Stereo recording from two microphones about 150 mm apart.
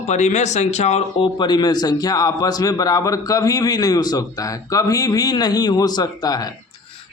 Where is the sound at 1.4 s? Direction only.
30° left (ahead or behind).